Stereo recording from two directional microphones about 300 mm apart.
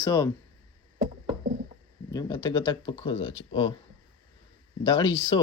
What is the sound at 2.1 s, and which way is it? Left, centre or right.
Speech, centre.